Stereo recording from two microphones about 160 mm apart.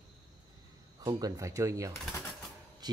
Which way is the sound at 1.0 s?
20° right (ahead or behind).